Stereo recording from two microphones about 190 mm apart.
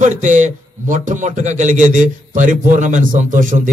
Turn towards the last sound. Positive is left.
turn(degrees=-45)  # may be behind; listen again after turning